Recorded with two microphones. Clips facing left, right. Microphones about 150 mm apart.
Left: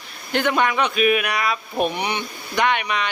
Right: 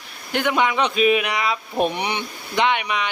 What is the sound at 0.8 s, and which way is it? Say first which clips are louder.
Speech: right 1 dB; 25° right (ahead or behind).